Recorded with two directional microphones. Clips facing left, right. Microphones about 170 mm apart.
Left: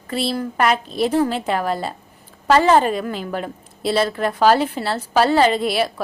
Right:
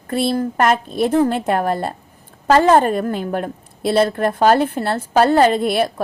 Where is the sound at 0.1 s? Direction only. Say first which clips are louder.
Right 4 dB; 55° right (ahead or behind).